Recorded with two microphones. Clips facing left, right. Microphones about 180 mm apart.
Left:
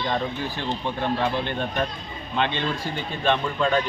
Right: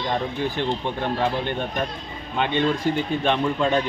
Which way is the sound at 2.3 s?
15° right (ahead or behind).